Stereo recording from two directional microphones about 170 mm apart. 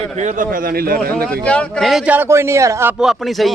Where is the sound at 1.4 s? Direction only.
5° left (ahead or behind); by 2.9 s 15° right (ahead or behind).